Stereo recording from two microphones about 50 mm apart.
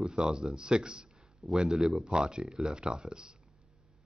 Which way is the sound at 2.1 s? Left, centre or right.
Centre.